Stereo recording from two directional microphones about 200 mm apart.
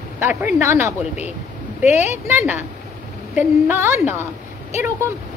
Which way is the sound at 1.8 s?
35° left (ahead or behind).